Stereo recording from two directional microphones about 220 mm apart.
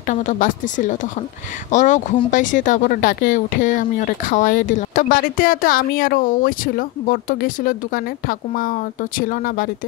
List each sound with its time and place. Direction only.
0.1 s speech: 35° left (ahead or behind)